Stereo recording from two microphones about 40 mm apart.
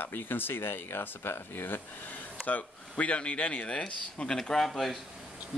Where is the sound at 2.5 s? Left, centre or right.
Left.